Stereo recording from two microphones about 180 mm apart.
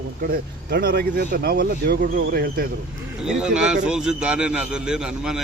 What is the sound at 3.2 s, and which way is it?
Speech, 5° right (ahead or behind).